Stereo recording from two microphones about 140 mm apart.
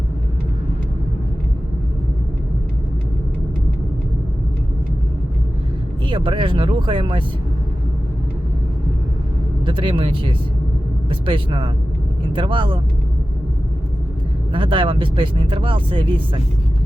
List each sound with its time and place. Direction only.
6.1 s speech: 35° right (ahead or behind)
9.6 s speech: 40° right (ahead or behind)
14.5 s speech: 40° right (ahead or behind)